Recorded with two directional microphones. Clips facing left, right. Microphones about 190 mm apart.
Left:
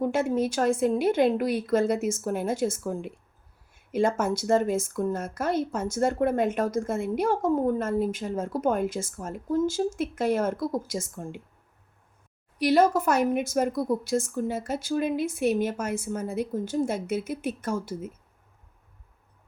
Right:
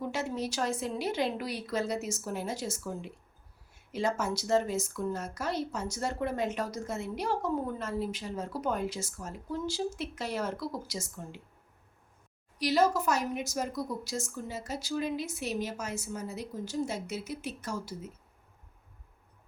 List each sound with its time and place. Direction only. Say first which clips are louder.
0.0 s a woman's voice: left 9 dB; 50° left (ahead or behind)
12.5 s a woman's voice: left 6 dB; 55° left (ahead or behind)